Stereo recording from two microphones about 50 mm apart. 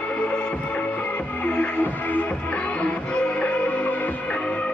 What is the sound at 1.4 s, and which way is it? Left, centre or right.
Music, left.